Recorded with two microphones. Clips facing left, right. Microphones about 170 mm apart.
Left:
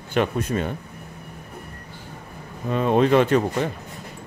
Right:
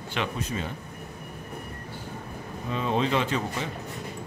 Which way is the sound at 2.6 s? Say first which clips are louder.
Left 8 dB; 55° left (ahead or behind).